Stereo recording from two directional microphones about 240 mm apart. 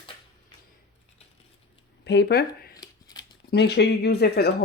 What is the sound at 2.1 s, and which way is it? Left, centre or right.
Speech, left.